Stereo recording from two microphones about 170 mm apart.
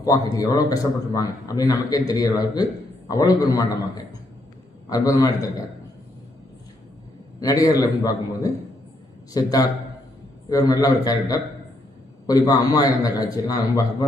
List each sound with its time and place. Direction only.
0.0 s a man's voice: 20° left (ahead or behind)
7.3 s a man's voice: 20° left (ahead or behind)